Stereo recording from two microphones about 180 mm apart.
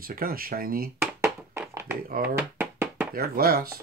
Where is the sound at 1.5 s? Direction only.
15° right (ahead or behind).